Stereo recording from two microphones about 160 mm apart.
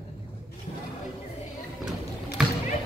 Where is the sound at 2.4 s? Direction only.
5° right (ahead or behind).